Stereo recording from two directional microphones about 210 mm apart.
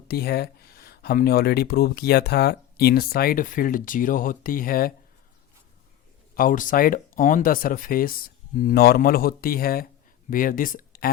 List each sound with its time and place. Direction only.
0.1 s speech: 50° left (ahead or behind)
6.3 s speech: 40° left (ahead or behind)